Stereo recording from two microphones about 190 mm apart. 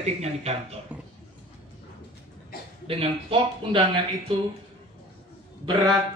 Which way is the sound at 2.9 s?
30° right (ahead or behind).